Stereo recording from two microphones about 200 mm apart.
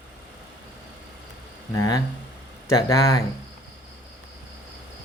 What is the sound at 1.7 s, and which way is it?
Speech, 15° left (ahead or behind).